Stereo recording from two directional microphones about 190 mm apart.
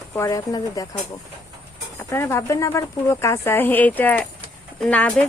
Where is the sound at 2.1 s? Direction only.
10° left (ahead or behind).